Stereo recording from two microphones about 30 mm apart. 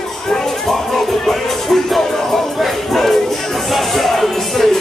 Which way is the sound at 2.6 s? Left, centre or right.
Centre.